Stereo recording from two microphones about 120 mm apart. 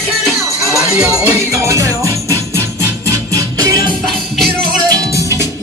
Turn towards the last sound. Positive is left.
turn(degrees=-30)  # may be behind; listen again after turning